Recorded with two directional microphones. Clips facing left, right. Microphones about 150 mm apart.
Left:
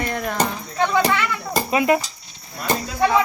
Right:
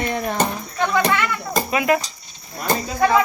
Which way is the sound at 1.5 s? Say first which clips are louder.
Left 1 dB; 30° left (ahead or behind).